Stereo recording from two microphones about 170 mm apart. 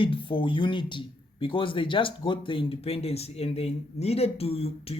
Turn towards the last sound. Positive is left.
turn(degrees=35)  # may be behind; listen again after turning